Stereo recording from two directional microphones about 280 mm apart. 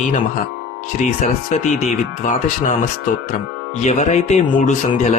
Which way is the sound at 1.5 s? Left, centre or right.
Left.